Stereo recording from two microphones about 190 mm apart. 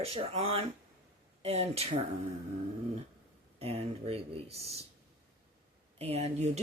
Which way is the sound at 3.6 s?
30° right (ahead or behind).